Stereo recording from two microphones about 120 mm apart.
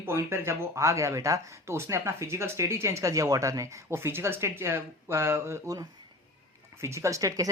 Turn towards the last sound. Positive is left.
turn(degrees=-30)  # may be behind; listen again after turning